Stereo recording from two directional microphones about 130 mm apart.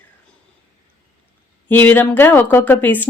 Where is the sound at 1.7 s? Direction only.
15° left (ahead or behind).